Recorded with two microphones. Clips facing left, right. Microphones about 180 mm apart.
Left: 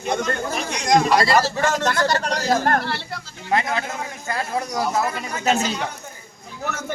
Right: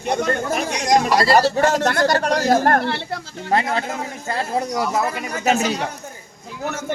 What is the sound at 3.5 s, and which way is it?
A man's voice, 35° right (ahead or behind).